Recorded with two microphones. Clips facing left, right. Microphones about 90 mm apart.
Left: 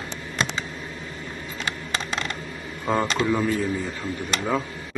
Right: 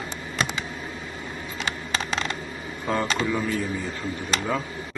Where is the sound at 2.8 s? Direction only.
10° left (ahead or behind).